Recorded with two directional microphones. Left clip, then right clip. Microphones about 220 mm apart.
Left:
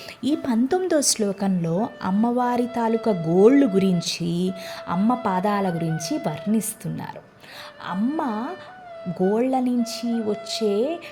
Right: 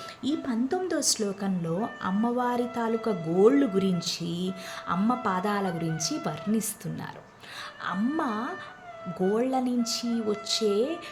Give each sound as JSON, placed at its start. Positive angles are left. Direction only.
{"t": 0.2, "sound": "speech", "side_deg": 35}